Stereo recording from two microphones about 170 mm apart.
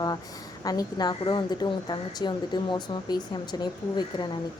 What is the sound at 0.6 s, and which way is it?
Speech, 20° left (ahead or behind).